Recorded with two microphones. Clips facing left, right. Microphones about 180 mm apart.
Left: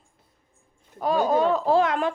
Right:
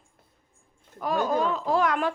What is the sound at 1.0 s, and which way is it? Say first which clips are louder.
Speech: left 4 dB; 35° left (ahead or behind).